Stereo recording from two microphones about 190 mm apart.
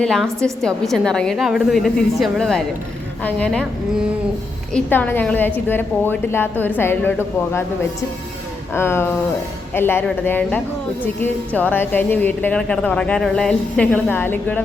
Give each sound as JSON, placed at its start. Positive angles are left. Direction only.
{"t": 0.0, "sound": "a woman's voice", "side_deg": 5}
{"t": 4.7, "sound": "a woman's voice", "side_deg": 10}
{"t": 8.7, "sound": "a woman's voice", "side_deg": 10}